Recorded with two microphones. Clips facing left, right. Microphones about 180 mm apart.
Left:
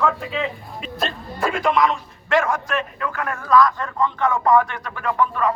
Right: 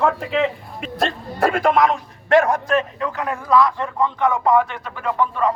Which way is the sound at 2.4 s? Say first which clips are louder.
Right 4 dB; 35° right (ahead or behind).